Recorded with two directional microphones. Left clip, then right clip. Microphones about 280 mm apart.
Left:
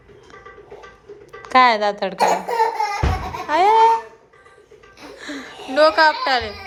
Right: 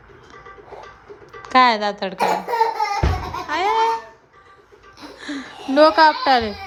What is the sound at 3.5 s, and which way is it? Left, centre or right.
Laughter, centre.